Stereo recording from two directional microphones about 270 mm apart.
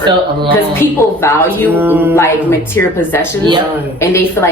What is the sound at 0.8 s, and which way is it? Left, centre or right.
Speech, centre.